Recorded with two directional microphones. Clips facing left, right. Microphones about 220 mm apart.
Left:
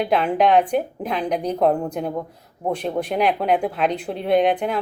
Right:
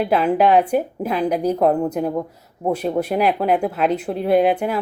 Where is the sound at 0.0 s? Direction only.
5° right (ahead or behind).